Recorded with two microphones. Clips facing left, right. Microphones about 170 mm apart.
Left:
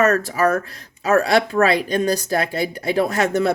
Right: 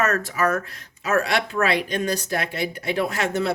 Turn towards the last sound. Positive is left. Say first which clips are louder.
# left 5 dB
turn(degrees=45)  # may be behind; listen again after turning